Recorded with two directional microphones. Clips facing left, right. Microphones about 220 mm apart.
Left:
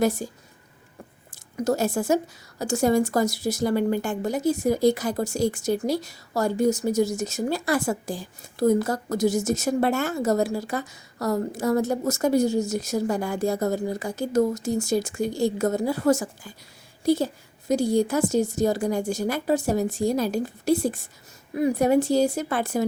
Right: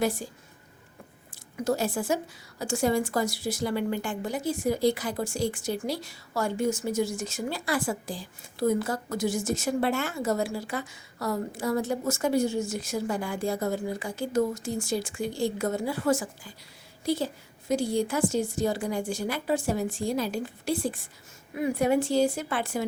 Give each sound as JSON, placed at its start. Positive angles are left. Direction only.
{"t": 0.0, "sound": "speech", "side_deg": 45}
{"t": 1.3, "sound": "a woman's voice", "side_deg": 45}